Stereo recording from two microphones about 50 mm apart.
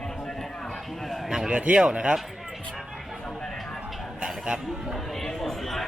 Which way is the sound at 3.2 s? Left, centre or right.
Centre.